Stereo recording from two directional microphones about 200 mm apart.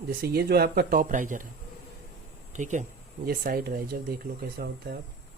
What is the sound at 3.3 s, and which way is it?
Speech, 50° right (ahead or behind).